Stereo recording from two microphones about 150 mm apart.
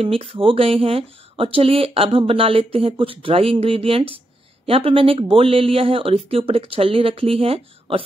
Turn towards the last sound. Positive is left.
turn(degrees=-35)  # may be behind; listen again after turning